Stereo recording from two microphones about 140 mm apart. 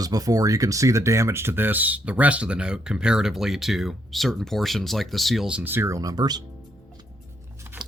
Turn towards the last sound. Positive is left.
turn(degrees=-30)  # may be behind; listen again after turning